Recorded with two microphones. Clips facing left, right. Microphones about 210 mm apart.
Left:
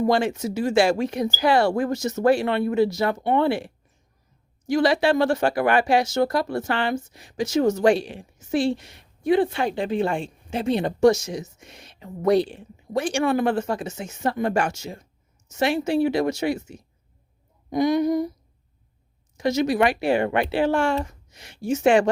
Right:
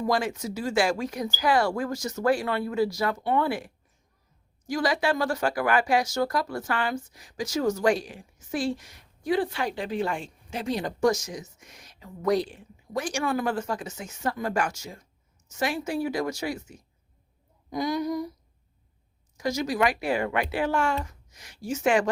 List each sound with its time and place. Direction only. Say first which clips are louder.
0.0 s speech: left 6 dB; 25° left (ahead or behind)
19.4 s speech: left 5 dB; 25° left (ahead or behind)